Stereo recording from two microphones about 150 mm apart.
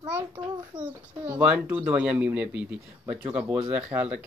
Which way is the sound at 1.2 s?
10° right (ahead or behind).